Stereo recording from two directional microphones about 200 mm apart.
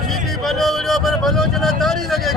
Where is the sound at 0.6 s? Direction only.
Centre (ahead or behind).